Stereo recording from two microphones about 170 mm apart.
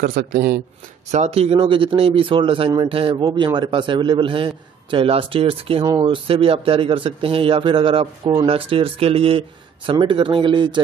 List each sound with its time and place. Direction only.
0.0 s speech: 60° right (ahead or behind)
1.1 s speech: 40° right (ahead or behind)